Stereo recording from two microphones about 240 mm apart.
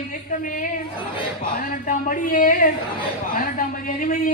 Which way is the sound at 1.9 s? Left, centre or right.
Left.